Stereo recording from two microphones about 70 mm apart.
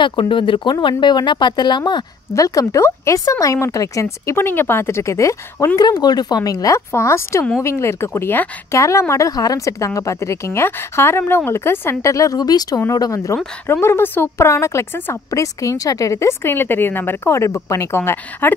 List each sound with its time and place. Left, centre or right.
1.0 s speech: left
2.3 s speech: left
2.6 s a woman's voice: left
3.3 s a woman's voice: left
5.8 s speech: left
6.9 s a woman's voice: left
8.7 s a woman's voice: left
9.3 s a woman's voice: left
13.7 s a woman's voice: left
17.3 s a woman's voice: left